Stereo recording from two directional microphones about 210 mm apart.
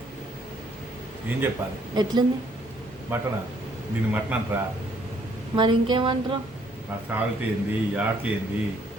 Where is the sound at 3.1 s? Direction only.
10° right (ahead or behind).